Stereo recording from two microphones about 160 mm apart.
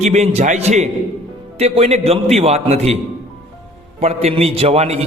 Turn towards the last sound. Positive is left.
turn(degrees=-40)  # may be behind; listen again after turning